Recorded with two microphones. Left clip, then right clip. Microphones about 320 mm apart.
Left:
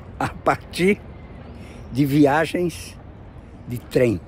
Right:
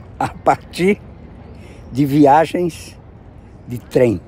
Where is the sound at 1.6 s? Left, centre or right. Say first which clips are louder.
Right 4 dB; centre.